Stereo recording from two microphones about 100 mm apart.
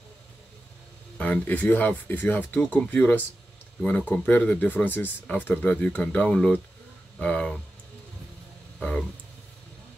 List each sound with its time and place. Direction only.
1.1 s speech: 15° left (ahead or behind)
8.7 s speech: 5° left (ahead or behind)